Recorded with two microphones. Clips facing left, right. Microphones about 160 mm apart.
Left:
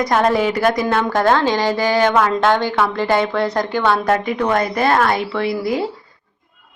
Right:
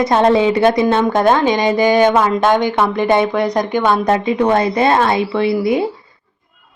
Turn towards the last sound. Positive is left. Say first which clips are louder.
# right 4 dB
turn(degrees=-20)  # may be behind; listen again after turning